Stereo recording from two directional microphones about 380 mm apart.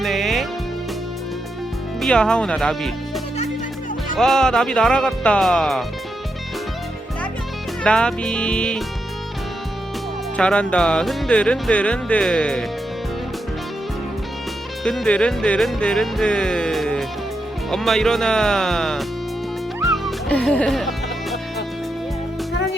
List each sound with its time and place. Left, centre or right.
0.0 s music: centre
2.0 s speech: centre
4.2 s speech: centre
7.9 s speech: centre
10.3 s speech: centre
14.8 s speech: centre
19.8 s music: centre